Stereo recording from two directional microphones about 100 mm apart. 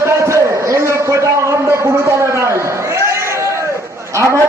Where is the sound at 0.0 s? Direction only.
30° right (ahead or behind).